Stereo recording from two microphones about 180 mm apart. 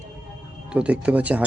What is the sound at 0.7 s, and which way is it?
Speech, 5° right (ahead or behind).